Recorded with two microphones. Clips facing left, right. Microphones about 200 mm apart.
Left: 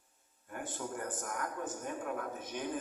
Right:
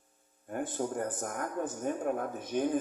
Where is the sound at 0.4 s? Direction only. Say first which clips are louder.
Right 8 dB; 45° right (ahead or behind).